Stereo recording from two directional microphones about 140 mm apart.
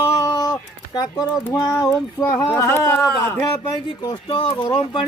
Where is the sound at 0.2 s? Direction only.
25° left (ahead or behind).